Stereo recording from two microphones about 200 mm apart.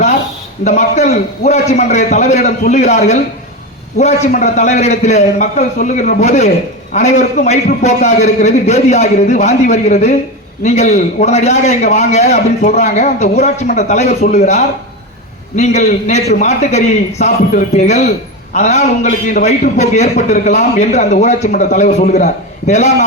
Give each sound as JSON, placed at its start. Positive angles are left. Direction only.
{"t": 0.6, "sound": "a man's voice", "side_deg": 35}